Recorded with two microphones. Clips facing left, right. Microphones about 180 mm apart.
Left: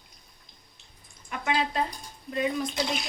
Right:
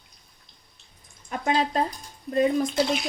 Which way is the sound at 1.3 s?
35° right (ahead or behind).